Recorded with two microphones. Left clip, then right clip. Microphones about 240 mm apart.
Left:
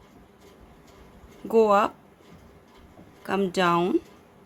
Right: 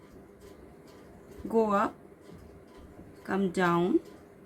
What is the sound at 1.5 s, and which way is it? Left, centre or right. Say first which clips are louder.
Speech: left 7 dB; left.